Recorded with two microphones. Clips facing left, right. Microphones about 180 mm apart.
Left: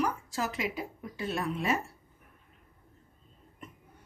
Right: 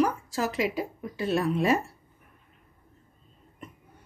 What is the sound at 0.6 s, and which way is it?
Speech, 90° right.